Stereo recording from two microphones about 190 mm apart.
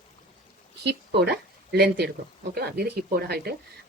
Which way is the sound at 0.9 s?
60° right (ahead or behind).